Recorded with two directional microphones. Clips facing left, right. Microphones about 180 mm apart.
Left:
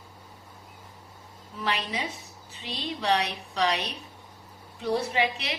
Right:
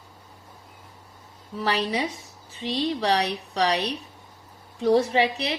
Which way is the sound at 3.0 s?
35° right (ahead or behind).